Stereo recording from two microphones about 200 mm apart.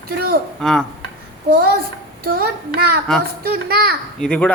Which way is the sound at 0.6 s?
Centre (ahead or behind).